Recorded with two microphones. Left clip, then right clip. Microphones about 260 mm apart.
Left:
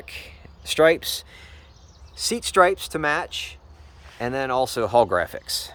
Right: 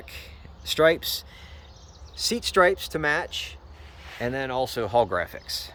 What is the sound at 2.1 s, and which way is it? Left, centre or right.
Speech, centre.